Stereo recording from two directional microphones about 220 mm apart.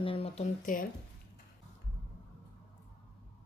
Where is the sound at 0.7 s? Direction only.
35° left (ahead or behind).